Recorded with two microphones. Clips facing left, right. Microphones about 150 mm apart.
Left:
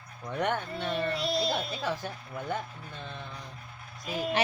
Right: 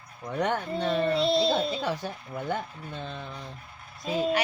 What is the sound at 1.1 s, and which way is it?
Speech, 25° right (ahead or behind).